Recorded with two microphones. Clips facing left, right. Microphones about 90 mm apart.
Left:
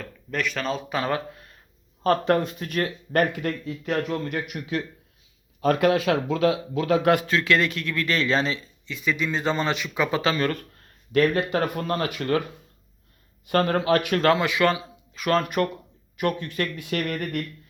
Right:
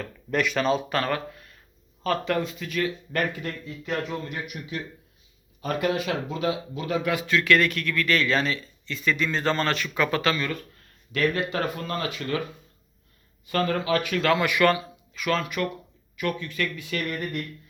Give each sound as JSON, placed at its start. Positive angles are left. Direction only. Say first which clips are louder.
{"t": 0.0, "sound": "speech", "louder": "right 3 dB", "side_deg": -5}
{"t": 1.0, "sound": "speech", "louder": "left 1 dB", "side_deg": 20}
{"t": 2.0, "sound": "speech", "louder": "left 5 dB", "side_deg": 45}
{"t": 7.3, "sound": "speech", "louder": "right 1 dB", "side_deg": 30}
{"t": 10.3, "sound": "speech", "louder": "left 4 dB", "side_deg": 50}
{"t": 11.1, "sound": "speech", "louder": "left 4 dB", "side_deg": 40}
{"t": 13.4, "sound": "speech", "louder": "left 3 dB", "side_deg": 50}
{"t": 14.3, "sound": "speech", "louder": "right 1 dB", "side_deg": 25}
{"t": 15.1, "sound": "speech", "louder": "left 4 dB", "side_deg": 40}